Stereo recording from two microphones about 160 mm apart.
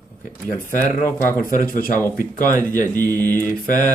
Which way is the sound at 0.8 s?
55° left (ahead or behind).